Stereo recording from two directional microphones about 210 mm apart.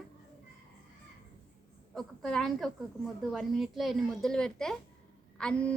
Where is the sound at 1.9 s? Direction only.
Centre (ahead or behind).